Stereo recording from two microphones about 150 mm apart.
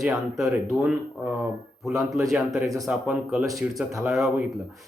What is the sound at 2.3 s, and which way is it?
Speech, 5° right (ahead or behind).